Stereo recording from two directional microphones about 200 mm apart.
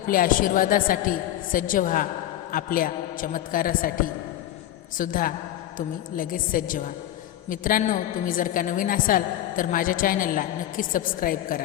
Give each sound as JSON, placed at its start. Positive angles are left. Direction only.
{"t": 0.1, "sound": "a woman's voice", "side_deg": 45}